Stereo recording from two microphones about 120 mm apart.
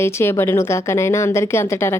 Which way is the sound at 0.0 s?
20° left (ahead or behind).